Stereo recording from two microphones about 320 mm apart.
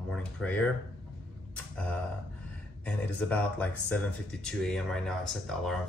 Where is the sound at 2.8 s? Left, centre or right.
Centre.